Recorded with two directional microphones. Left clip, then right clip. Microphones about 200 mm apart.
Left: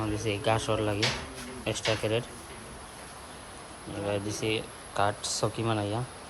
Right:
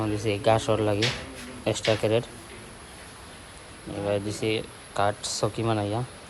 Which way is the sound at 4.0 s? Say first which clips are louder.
Right 4 dB; 15° left (ahead or behind).